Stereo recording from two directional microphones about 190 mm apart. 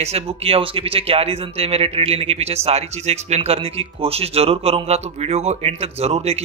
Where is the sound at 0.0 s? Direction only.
35° right (ahead or behind).